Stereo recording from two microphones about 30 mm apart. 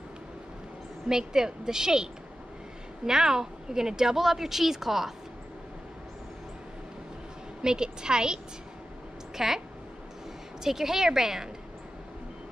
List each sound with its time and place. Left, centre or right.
1.0 s a woman's voice: centre
3.1 s a woman's voice: centre
7.6 s a woman's voice: right
9.4 s a woman's voice: centre
10.6 s a woman's voice: centre